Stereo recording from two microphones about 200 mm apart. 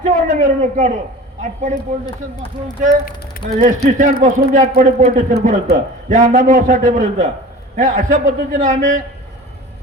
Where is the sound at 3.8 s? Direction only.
40° right (ahead or behind).